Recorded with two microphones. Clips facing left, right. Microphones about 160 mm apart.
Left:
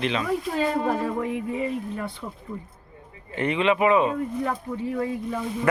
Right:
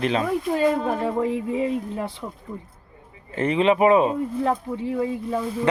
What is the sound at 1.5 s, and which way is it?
Speech, 90° right.